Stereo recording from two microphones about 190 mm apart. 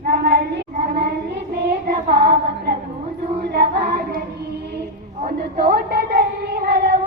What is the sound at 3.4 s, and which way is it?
Child singing, 60° right (ahead or behind).